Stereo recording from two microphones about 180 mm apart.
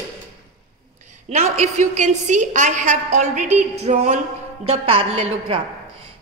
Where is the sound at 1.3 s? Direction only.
40° right (ahead or behind).